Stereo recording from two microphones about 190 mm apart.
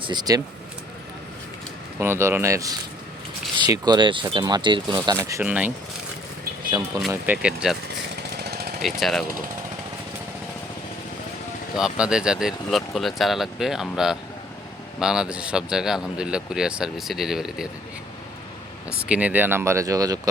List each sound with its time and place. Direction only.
0.0 s speech: 20° right (ahead or behind)
2.0 s speech: 15° right (ahead or behind)
6.7 s speech: 20° right (ahead or behind)
7.1 s speech: 5° right (ahead or behind)
8.1 s chainsaw: 60° right (ahead or behind)
9.0 s speech: centre (ahead or behind)
11.8 s speech: 5° right (ahead or behind)
18.9 s speech: 5° right (ahead or behind)